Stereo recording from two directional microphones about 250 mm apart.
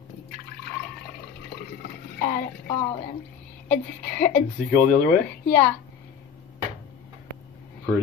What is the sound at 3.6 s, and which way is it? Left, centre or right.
Speech, centre.